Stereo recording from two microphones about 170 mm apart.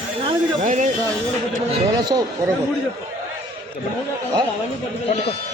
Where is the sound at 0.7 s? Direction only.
50° right (ahead or behind).